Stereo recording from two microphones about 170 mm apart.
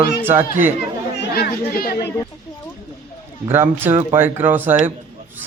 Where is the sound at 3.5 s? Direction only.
15° right (ahead or behind).